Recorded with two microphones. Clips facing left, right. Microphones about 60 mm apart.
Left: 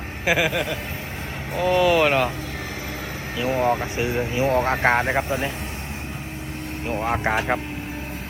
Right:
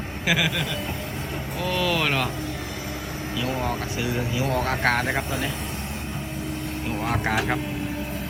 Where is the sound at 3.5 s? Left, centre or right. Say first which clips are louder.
Left 9 dB; left.